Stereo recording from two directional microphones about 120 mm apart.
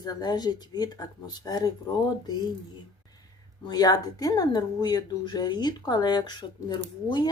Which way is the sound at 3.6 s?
35° left (ahead or behind).